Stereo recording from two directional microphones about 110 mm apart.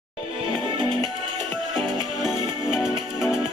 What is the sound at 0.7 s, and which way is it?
Music, 45° right (ahead or behind).